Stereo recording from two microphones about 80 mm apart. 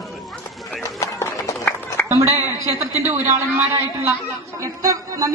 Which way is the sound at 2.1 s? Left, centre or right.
Right.